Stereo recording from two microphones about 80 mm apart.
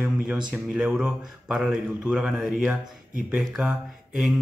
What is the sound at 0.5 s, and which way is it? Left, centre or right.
A man's voice, centre.